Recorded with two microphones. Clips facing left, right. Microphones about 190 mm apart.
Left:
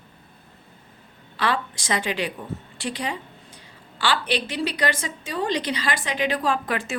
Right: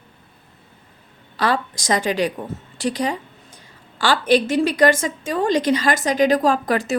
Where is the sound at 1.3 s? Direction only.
40° right (ahead or behind).